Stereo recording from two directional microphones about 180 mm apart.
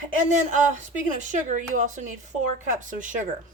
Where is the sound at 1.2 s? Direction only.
45° right (ahead or behind).